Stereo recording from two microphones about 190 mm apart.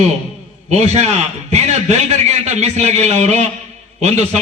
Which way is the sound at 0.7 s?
35° right (ahead or behind).